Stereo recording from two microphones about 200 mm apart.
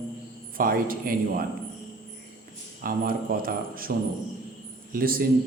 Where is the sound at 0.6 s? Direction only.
45° right (ahead or behind).